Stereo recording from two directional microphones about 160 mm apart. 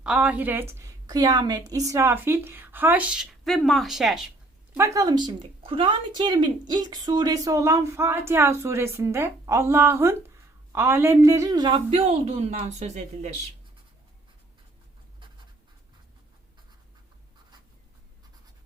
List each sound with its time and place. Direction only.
0.0 s speech: 5° right (ahead or behind)
4.9 s a woman's voice: 25° right (ahead or behind); by 13.0 s 45° right (ahead or behind)